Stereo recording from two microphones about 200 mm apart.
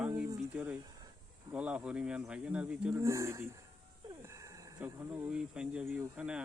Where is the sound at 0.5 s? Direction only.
5° right (ahead or behind).